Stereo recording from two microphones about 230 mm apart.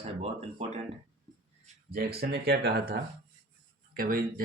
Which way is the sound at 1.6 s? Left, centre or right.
Right.